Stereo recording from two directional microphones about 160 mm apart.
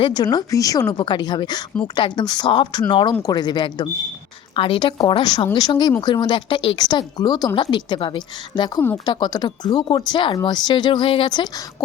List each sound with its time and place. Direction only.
0.0 s speech: 25° left (ahead or behind)